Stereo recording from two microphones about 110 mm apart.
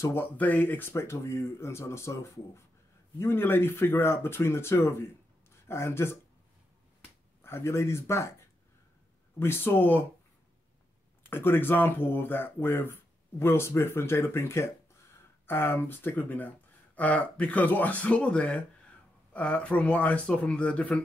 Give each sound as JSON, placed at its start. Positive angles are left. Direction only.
{"t": 0.1, "sound": "speech", "side_deg": 15}
{"t": 7.4, "sound": "speech", "side_deg": 25}
{"t": 9.4, "sound": "speech", "side_deg": 20}
{"t": 11.2, "sound": "speech", "side_deg": 20}